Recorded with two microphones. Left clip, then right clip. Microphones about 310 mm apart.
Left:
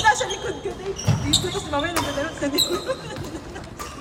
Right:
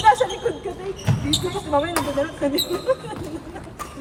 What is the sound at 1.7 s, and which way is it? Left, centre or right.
Speech, right.